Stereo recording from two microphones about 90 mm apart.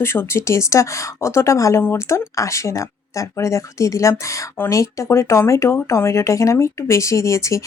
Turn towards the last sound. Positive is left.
turn(degrees=35)  # may be behind; listen again after turning